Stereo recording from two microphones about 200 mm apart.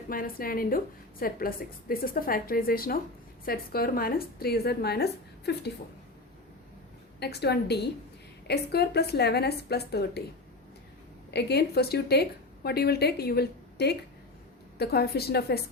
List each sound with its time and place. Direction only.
0.1 s a woman's voice: 45° left (ahead or behind)
7.2 s a woman's voice: 55° left (ahead or behind)
11.3 s a woman's voice: 55° left (ahead or behind)